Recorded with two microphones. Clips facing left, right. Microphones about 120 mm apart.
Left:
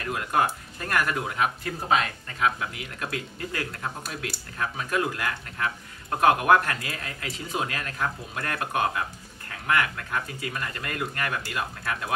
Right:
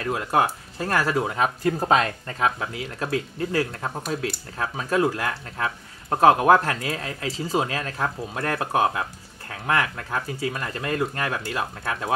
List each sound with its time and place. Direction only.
0.0 s speech: 30° right (ahead or behind)